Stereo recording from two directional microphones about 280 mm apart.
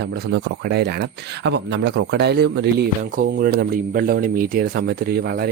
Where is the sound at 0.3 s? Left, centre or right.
Right.